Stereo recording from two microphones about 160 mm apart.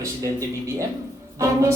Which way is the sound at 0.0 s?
20° right (ahead or behind).